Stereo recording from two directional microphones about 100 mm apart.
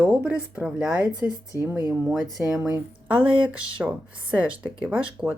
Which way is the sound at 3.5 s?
10° right (ahead or behind).